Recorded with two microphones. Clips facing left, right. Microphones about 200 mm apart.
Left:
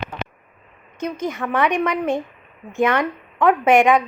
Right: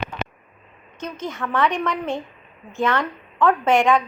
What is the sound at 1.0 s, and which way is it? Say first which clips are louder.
A woman's voice: left 4 dB; 15° left (ahead or behind).